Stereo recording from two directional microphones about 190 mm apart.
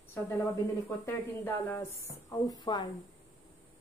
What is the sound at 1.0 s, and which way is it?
A woman's voice, 10° left (ahead or behind).